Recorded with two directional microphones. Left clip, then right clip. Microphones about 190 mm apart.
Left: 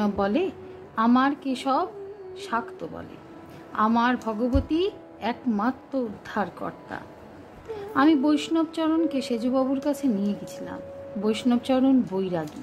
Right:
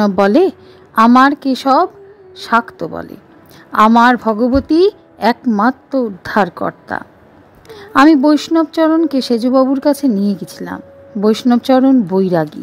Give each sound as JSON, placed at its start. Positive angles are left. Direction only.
{"t": 0.0, "sound": "a woman's voice", "side_deg": -50}